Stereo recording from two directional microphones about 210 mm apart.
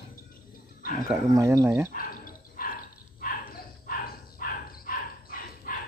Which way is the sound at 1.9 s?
40° left (ahead or behind).